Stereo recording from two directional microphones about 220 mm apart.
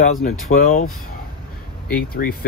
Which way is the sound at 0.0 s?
35° left (ahead or behind).